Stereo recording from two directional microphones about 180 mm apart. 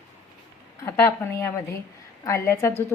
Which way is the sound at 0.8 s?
15° left (ahead or behind).